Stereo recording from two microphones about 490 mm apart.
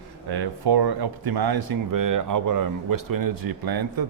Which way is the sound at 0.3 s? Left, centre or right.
Right.